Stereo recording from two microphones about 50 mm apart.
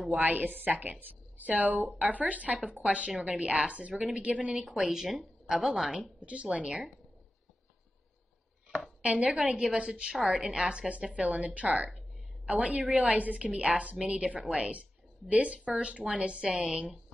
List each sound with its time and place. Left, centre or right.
0.1 s a woman's voice: right
4.8 s a woman's voice: centre
6.2 s a woman's voice: right
9.0 s a woman's voice: right